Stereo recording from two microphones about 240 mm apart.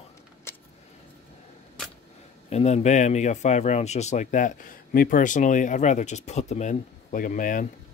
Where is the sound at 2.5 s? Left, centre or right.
Left.